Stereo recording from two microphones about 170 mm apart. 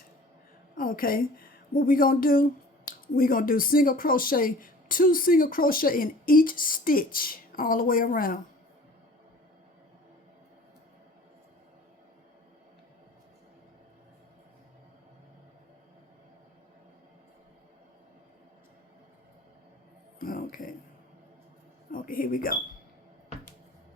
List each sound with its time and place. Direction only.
0.8 s speech: 55° left (ahead or behind)
20.1 s a sound: 55° left (ahead or behind)
21.9 s speech: 55° left (ahead or behind)